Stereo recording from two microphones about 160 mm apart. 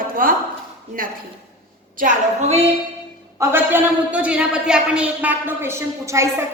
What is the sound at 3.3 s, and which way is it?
A woman's voice, 15° right (ahead or behind).